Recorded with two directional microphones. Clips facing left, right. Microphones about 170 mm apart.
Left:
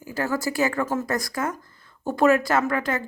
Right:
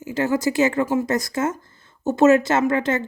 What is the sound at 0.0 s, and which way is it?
Speech, 20° right (ahead or behind).